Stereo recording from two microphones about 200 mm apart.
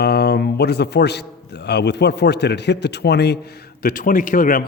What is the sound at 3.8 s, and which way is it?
Speech, 45° left (ahead or behind).